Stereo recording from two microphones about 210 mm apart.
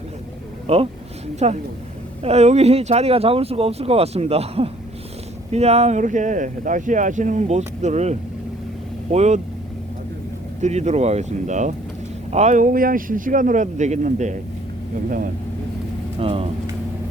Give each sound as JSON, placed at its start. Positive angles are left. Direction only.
{"t": 0.7, "sound": "speech", "side_deg": -30}
{"t": 9.1, "sound": "speech", "side_deg": -35}
{"t": 10.6, "sound": "speech", "side_deg": -30}
{"t": 16.2, "sound": "speech", "side_deg": -25}